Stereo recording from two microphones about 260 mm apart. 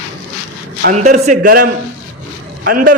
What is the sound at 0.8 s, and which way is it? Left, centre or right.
A man's voice, right.